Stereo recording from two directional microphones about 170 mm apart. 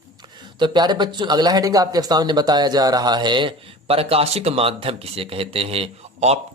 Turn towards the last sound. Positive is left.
turn(degrees=-35)  # may be behind; listen again after turning